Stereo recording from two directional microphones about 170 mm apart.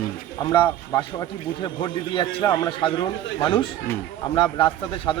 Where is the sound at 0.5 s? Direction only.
25° left (ahead or behind).